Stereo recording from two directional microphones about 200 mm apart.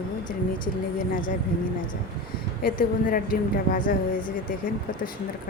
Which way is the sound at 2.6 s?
45° left (ahead or behind).